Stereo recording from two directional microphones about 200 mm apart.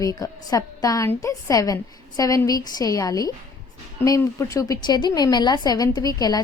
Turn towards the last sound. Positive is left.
turn(degrees=20)  # may be behind; listen again after turning